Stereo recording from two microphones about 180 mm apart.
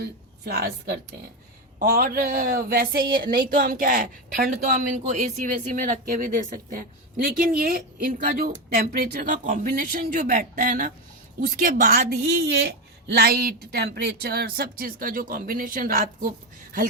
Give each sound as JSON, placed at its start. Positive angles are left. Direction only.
{"t": 0.0, "sound": "a woman's voice", "side_deg": -60}